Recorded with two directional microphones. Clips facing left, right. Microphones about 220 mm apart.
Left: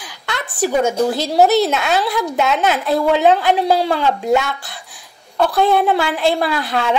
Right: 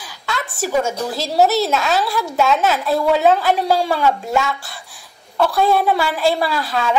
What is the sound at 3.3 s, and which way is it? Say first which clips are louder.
Speech: left 2 dB; 20° left (ahead or behind).